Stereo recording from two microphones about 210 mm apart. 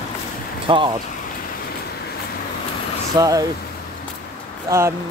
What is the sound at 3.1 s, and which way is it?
Speech, 15° right (ahead or behind).